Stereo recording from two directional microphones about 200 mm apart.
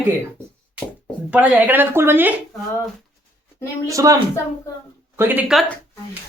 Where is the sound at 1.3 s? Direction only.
5° right (ahead or behind).